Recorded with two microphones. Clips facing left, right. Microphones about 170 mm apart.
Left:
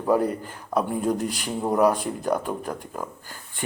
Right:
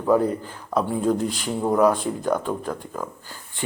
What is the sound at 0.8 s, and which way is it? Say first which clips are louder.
Speech: right 2 dB; 10° left (ahead or behind).